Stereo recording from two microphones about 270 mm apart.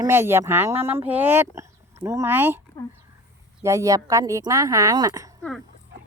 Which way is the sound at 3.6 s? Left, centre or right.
Centre.